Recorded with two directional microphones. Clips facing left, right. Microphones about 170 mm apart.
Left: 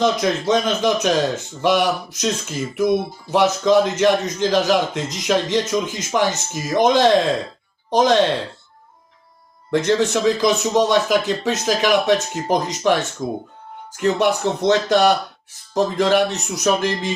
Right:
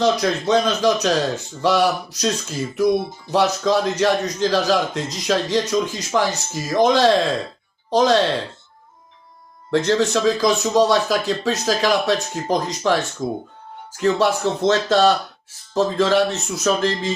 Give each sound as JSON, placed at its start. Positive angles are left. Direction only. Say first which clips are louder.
{"t": 0.0, "sound": "speech", "louder": "even", "side_deg": 20}
{"t": 9.7, "sound": "speech", "louder": "even", "side_deg": 20}